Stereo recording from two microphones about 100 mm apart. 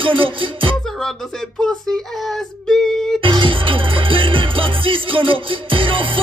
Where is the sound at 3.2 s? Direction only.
60° right (ahead or behind).